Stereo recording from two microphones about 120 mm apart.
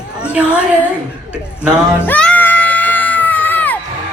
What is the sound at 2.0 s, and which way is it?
Crowd, 10° left (ahead or behind).